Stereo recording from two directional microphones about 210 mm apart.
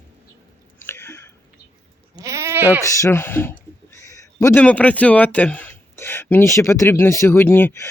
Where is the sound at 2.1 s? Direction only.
15° right (ahead or behind).